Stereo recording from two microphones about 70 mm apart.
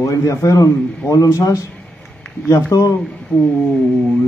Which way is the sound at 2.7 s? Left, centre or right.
Left.